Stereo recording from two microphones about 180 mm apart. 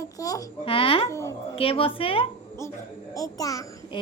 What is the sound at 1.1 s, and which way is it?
Speech, 15° left (ahead or behind).